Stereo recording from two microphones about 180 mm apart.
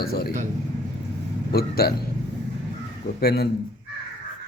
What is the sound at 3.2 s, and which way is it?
Speech, 60° left (ahead or behind).